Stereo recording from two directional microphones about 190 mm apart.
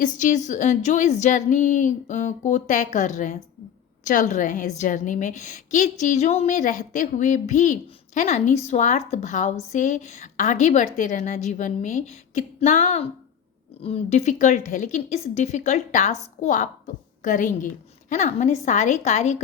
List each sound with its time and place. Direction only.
0.0 s a woman's voice: 40° left (ahead or behind)